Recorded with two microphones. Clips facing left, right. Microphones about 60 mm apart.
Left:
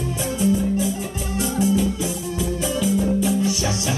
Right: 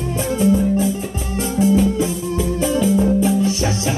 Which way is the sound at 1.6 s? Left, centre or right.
Right.